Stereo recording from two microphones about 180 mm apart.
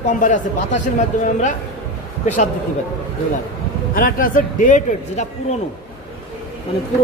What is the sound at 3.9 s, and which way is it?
A man's voice, 50° left (ahead or behind).